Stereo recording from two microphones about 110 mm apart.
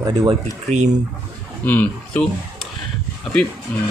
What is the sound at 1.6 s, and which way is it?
Speech, 15° left (ahead or behind).